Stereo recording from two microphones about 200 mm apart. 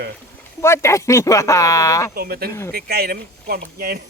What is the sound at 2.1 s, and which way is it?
Speech, 50° right (ahead or behind).